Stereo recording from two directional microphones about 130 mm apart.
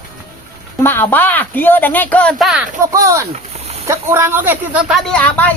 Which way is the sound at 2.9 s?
25° right (ahead or behind).